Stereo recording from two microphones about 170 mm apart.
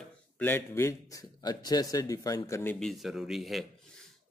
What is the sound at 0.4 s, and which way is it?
A man's voice, 10° left (ahead or behind).